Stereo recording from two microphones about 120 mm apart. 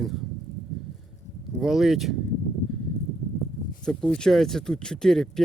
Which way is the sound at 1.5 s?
Centre (ahead or behind).